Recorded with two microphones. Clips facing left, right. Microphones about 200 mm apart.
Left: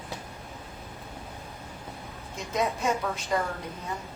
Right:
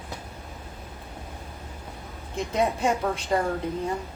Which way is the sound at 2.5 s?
30° right (ahead or behind).